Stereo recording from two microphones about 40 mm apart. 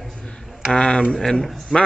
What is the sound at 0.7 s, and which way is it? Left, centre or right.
Speech, left.